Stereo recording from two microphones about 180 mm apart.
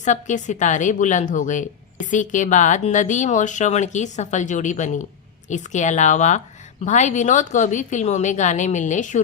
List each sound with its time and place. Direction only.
0.0 s a woman's voice: 45° left (ahead or behind)